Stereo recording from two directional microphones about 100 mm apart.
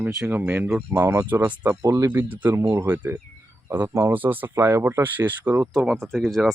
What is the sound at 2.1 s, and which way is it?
Speech, 15° right (ahead or behind).